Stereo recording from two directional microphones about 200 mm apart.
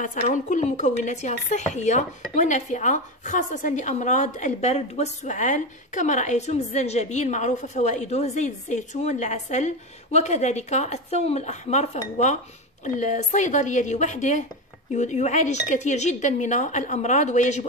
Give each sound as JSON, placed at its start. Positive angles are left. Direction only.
{"t": 0.0, "sound": "speech", "side_deg": 40}